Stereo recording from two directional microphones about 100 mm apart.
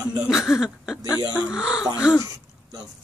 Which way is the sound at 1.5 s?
5° right (ahead or behind).